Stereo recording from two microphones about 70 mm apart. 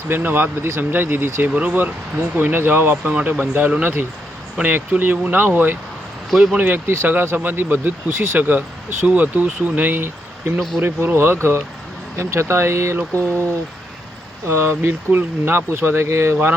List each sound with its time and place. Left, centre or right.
0.1 s speech: right
3.0 s speech: centre
3.4 s speech: right
14.4 s speech: right